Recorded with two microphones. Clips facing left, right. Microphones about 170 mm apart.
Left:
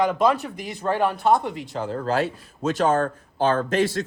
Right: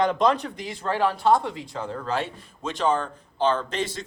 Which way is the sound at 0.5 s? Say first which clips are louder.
Left 2 dB; 55° left (ahead or behind).